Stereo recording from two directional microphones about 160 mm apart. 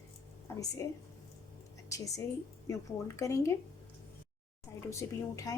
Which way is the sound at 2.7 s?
20° left (ahead or behind).